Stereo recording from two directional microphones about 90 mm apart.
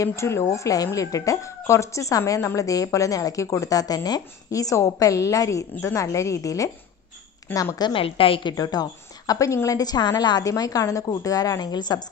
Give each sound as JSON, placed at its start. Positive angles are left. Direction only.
{"t": 0.0, "sound": "speech", "side_deg": 30}
{"t": 7.9, "sound": "a woman's voice", "side_deg": 90}
{"t": 8.5, "sound": "a woman's voice", "side_deg": 45}